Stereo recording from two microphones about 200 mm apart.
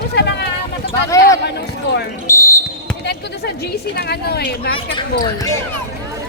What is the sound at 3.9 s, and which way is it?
Speech, 55° left (ahead or behind).